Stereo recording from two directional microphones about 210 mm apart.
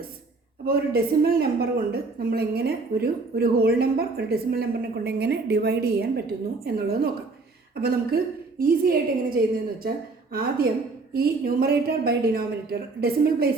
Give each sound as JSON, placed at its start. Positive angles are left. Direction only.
{"t": 0.6, "sound": "a woman's voice", "side_deg": -45}